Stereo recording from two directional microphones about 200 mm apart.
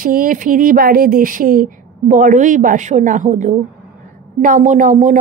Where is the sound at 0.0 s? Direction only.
45° right (ahead or behind).